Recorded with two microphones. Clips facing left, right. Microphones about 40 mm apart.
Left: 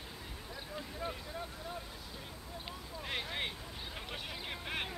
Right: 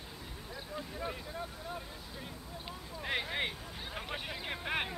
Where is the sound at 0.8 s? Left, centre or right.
Centre.